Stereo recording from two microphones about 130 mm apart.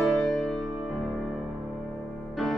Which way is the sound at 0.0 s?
Centre (ahead or behind).